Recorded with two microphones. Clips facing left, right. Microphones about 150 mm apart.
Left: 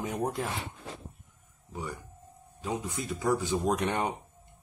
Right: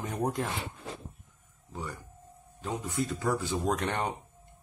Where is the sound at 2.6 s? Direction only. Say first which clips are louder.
Right 1 dB; 15° left (ahead or behind).